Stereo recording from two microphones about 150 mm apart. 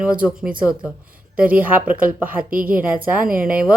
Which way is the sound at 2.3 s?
70° right (ahead or behind).